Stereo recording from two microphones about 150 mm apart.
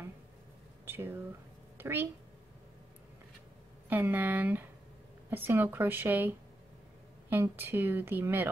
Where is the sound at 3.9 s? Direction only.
10° right (ahead or behind).